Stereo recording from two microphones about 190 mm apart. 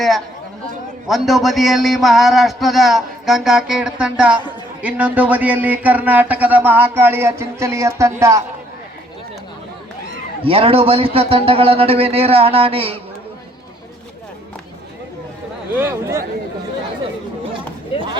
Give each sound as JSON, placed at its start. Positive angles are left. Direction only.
{"t": 1.0, "sound": "a man's voice", "side_deg": 0}
{"t": 10.4, "sound": "speech", "side_deg": -30}
{"t": 15.7, "sound": "speech", "side_deg": -10}